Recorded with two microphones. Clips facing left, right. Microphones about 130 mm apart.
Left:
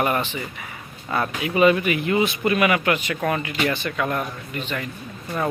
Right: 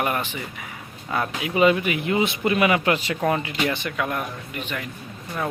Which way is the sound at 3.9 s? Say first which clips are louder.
Left 2 dB; 5° right (ahead or behind).